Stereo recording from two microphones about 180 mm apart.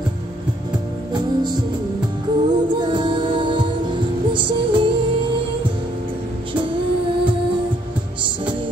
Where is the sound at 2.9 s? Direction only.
25° right (ahead or behind).